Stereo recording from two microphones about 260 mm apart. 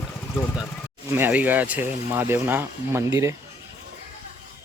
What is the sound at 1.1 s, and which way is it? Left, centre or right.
Speech, centre.